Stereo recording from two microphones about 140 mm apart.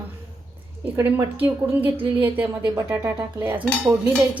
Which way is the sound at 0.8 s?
10° right (ahead or behind).